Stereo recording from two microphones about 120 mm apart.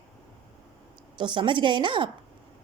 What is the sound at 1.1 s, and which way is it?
Speech, 40° right (ahead or behind).